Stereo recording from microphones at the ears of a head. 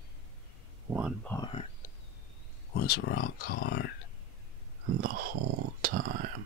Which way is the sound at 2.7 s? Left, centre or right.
Left.